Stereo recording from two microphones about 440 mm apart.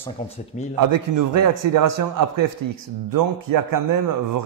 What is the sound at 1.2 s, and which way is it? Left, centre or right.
A man's voice, right.